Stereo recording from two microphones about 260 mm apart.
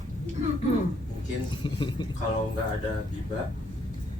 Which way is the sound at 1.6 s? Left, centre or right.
Centre.